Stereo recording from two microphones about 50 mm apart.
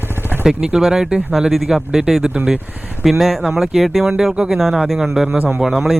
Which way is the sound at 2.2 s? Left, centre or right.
Right.